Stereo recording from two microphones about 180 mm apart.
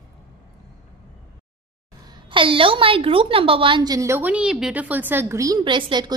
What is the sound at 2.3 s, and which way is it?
A woman's voice, 30° right (ahead or behind).